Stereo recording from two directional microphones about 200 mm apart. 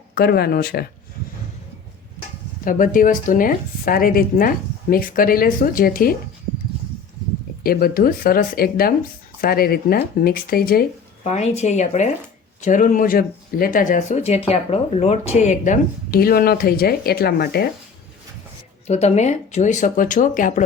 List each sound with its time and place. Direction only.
0.1 s speech: 50° left (ahead or behind)
2.6 s speech: 40° left (ahead or behind)
7.6 s speech: 50° left (ahead or behind)
11.3 s speech: 35° left (ahead or behind); by 17.7 s 50° left (ahead or behind)
18.9 s speech: 35° left (ahead or behind)